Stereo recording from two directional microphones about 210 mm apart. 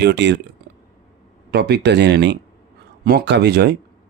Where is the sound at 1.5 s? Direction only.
50° right (ahead or behind).